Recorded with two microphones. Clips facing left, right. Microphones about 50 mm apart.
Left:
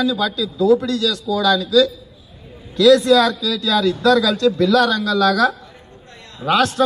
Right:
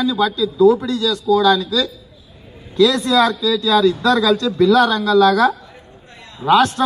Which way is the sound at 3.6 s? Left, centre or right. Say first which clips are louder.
Right 1 dB; centre.